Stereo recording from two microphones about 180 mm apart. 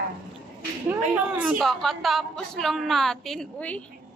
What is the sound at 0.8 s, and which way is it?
A woman's voice, 5° right (ahead or behind).